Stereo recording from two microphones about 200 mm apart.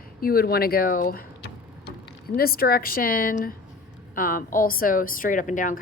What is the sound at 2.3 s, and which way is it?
A woman's voice, 50° left (ahead or behind).